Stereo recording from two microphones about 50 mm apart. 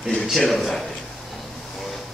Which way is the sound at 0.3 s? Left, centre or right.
Centre.